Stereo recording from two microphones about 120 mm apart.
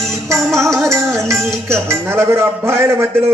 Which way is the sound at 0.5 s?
25° right (ahead or behind).